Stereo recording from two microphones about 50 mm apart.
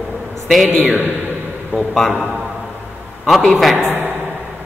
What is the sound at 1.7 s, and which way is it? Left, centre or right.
Speech, right.